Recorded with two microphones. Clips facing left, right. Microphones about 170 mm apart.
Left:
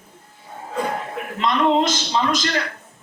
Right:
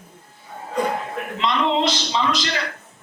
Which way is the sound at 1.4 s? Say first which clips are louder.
Left 3 dB; 45° left (ahead or behind).